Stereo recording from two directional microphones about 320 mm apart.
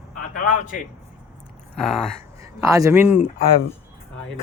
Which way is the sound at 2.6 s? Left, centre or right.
Centre.